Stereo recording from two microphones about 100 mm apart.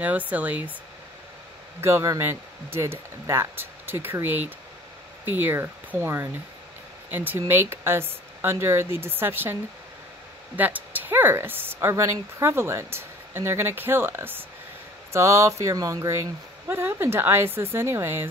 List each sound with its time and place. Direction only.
0.3 s speech: 15° right (ahead or behind)
1.8 s speech: 30° right (ahead or behind)